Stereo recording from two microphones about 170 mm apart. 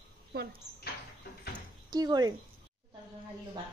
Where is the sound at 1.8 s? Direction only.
25° right (ahead or behind).